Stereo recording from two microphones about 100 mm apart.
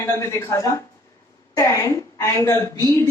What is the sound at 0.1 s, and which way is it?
A woman's voice, 30° left (ahead or behind).